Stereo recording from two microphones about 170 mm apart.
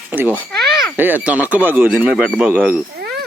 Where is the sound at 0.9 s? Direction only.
10° right (ahead or behind).